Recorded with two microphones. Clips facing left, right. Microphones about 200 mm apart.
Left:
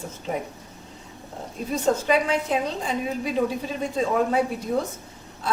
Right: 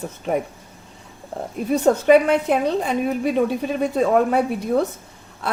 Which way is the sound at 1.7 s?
60° right (ahead or behind).